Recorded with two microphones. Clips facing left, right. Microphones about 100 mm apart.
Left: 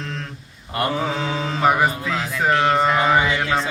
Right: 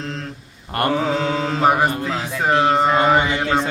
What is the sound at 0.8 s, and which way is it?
Mantra, 60° right (ahead or behind).